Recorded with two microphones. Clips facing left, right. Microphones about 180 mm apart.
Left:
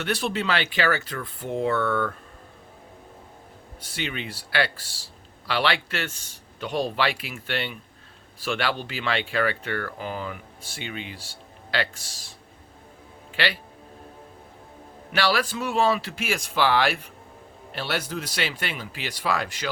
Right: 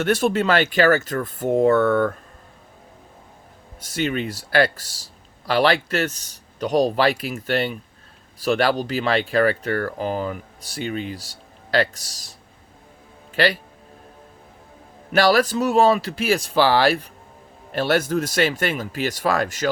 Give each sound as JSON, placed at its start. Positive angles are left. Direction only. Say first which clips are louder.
{"t": 0.0, "sound": "speech", "louder": "right 7 dB", "side_deg": -45}
{"t": 3.8, "sound": "speech", "louder": "right 9 dB", "side_deg": -45}
{"t": 13.3, "sound": "a man's voice", "louder": "right 8 dB", "side_deg": -40}
{"t": 15.1, "sound": "speech", "louder": "right 7 dB", "side_deg": -45}
{"t": 17.7, "sound": "speech", "louder": "right 10 dB", "side_deg": -45}